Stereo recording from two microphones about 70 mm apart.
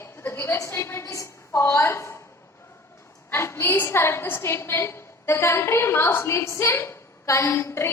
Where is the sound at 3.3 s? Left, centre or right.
Left.